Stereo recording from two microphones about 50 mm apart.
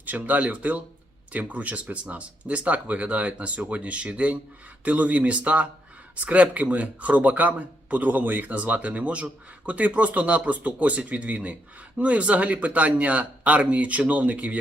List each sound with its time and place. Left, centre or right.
0.0 s speech: right